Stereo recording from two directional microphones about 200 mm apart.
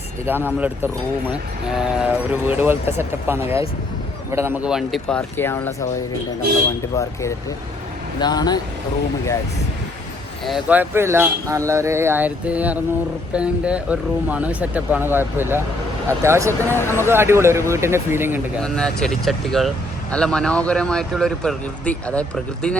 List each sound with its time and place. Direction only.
0.3 s speech: 10° right (ahead or behind); by 5.5 s 10° left (ahead or behind)
6.9 s speech: 15° left (ahead or behind)
10.4 s speech: 5° right (ahead or behind)
16.7 s speech: 10° left (ahead or behind)
17.1 s speech: 10° right (ahead or behind)
18.6 s speech: 5° left (ahead or behind)